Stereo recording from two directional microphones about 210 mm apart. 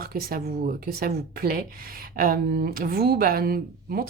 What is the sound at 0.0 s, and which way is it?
A woman's voice, 45° right (ahead or behind).